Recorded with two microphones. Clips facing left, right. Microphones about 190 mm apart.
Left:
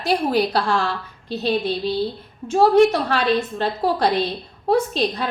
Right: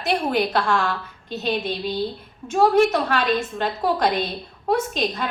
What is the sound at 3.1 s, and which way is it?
A woman's voice, 35° left (ahead or behind).